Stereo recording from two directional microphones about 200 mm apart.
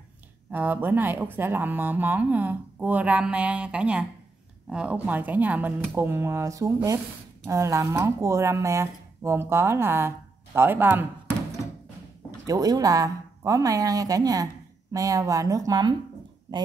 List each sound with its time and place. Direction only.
0.5 s speech: 10° right (ahead or behind)
12.4 s speech: 20° right (ahead or behind)